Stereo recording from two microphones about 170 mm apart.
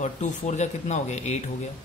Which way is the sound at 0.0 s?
40° left (ahead or behind).